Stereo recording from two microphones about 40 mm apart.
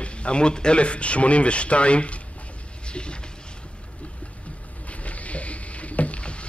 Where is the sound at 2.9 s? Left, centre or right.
Left.